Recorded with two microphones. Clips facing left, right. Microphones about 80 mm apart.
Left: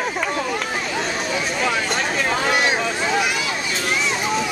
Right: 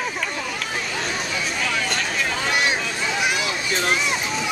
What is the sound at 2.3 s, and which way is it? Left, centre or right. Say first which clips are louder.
Boat: left 3 dB; left.